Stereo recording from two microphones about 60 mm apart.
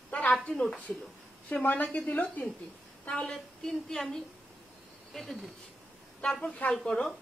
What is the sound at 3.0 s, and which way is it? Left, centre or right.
Speech, centre.